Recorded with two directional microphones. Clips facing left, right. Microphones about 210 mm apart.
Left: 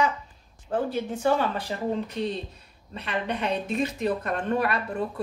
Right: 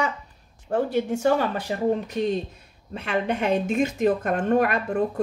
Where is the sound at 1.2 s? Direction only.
45° right (ahead or behind).